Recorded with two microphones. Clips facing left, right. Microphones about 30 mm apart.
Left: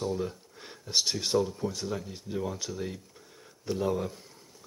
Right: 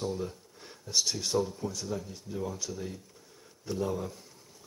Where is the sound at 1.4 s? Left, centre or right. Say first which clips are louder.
Left 3 dB; left.